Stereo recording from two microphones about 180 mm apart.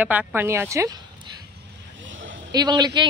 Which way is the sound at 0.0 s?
10° right (ahead or behind).